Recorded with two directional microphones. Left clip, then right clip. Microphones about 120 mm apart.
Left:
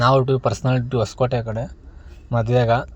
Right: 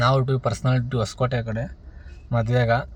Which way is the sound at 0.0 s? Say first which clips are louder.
Left 5 dB; 15° left (ahead or behind).